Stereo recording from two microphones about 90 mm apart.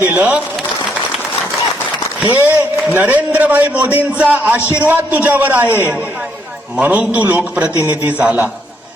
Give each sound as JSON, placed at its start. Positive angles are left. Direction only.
{"t": 0.0, "sound": "a man's voice", "side_deg": -20}
{"t": 2.3, "sound": "a man's voice", "side_deg": -20}
{"t": 5.6, "sound": "a man's voice", "side_deg": 25}
{"t": 6.7, "sound": "a man's voice", "side_deg": -15}